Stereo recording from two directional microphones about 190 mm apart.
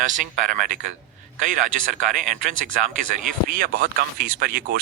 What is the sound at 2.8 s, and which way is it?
Speech, 45° right (ahead or behind).